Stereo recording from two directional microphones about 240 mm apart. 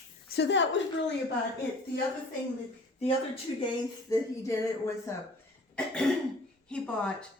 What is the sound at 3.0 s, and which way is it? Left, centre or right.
Speech, left.